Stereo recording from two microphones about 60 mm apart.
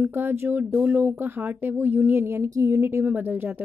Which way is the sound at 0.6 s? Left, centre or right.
Right.